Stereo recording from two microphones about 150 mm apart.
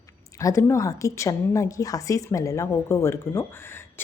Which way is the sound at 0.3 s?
20° left (ahead or behind).